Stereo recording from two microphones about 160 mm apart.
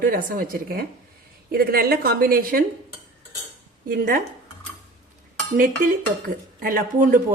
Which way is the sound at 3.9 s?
70° right (ahead or behind).